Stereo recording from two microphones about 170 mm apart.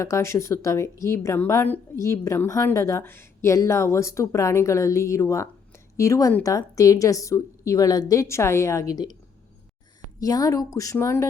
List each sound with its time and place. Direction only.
0.0 s a woman's voice: 15° left (ahead or behind)
10.2 s a woman's voice: 20° left (ahead or behind)